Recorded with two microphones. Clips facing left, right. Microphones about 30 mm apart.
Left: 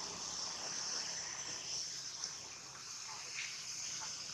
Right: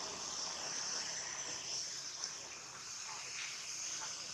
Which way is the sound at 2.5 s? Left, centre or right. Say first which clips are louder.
Right 1 dB; centre.